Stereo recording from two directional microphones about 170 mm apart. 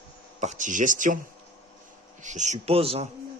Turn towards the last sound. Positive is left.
turn(degrees=-35)  # may be behind; listen again after turning